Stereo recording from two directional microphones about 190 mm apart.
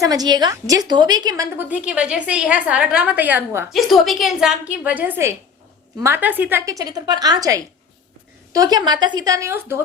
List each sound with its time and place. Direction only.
0.0 s a woman's voice: 20° right (ahead or behind)
1.5 s a woman's voice: 5° right (ahead or behind)
3.7 s a woman's voice: centre (ahead or behind)